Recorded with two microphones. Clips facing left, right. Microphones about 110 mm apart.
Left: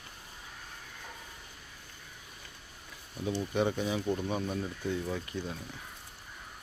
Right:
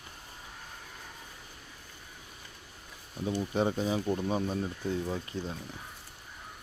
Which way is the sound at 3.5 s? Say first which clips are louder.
Right 1 dB; 35° right (ahead or behind).